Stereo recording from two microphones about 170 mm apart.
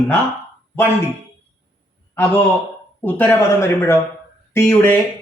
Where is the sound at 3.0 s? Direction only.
10° left (ahead or behind).